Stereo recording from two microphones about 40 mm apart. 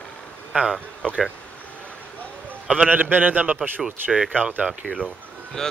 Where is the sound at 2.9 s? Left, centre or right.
Right.